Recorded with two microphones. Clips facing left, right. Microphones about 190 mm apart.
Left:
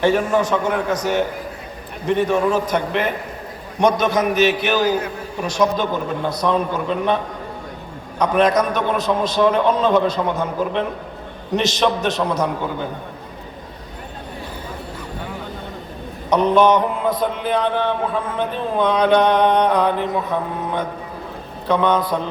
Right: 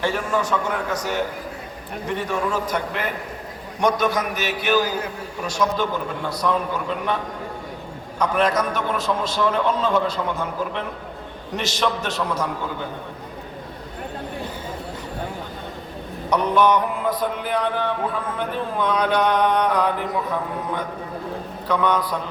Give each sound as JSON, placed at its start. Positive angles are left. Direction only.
{"t": 0.0, "sound": "mantra", "side_deg": 20}
{"t": 8.2, "sound": "mantra", "side_deg": 20}
{"t": 16.3, "sound": "mantra", "side_deg": 25}
{"t": 21.7, "sound": "mantra", "side_deg": 25}